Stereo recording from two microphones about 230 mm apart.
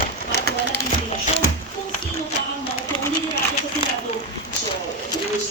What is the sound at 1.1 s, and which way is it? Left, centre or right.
Music, left.